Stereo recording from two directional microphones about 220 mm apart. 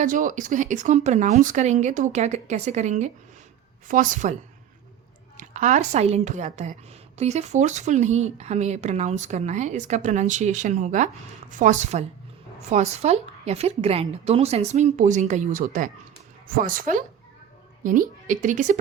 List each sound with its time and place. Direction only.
0.0 s speech: 35° right (ahead or behind)
5.4 s a woman's voice: 35° right (ahead or behind)